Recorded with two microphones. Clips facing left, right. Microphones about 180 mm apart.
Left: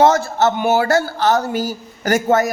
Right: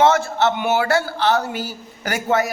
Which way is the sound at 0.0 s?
40° left (ahead or behind).